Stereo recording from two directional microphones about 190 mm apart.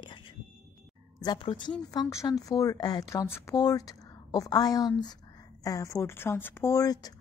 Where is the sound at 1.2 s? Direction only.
25° left (ahead or behind).